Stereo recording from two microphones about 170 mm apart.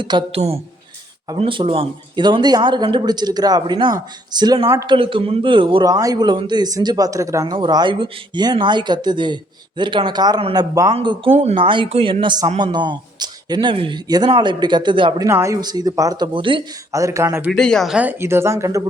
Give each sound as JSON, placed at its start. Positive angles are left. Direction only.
{"t": 0.0, "sound": "a man's voice", "side_deg": -30}
{"t": 4.9, "sound": "a man's voice", "side_deg": -30}
{"t": 15.3, "sound": "a man's voice", "side_deg": -15}
{"t": 16.9, "sound": "speech", "side_deg": -20}
{"t": 17.5, "sound": "speech", "side_deg": 5}